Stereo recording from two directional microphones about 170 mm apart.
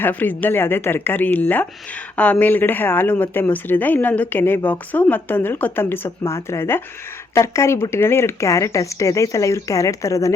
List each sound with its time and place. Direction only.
0.0 s a woman's voice: 10° left (ahead or behind)